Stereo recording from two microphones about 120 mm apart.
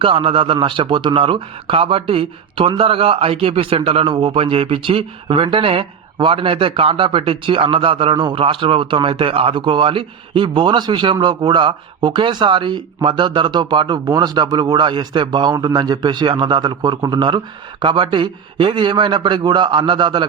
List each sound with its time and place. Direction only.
0.0 s a man's voice: 45° right (ahead or behind)